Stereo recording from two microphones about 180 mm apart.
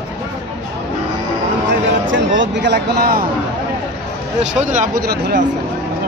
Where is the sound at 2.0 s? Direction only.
90° right; by 3.2 s 65° right (ahead or behind).